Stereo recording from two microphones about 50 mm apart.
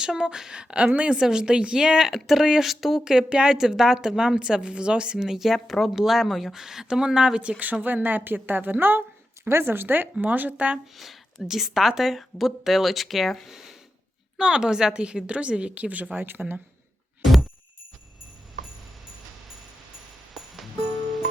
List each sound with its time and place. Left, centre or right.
0.0 s a woman's voice: centre
1.2 s a woman's voice: centre
2.1 s a woman's voice: centre
7.6 s a woman's voice: right
10.9 s a woman's voice: centre; by 16.1 s right
16.1 s speech: right
17.2 s jingle bell: centre
20.3 s music: centre